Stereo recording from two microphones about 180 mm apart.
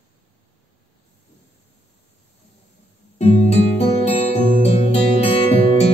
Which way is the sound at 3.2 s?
35° left (ahead or behind).